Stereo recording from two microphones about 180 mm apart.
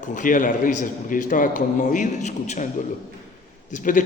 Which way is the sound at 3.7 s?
45° left (ahead or behind).